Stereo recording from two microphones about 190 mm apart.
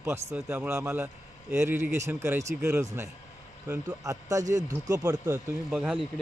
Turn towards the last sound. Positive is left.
turn(degrees=-5)  # may be behind; listen again after turning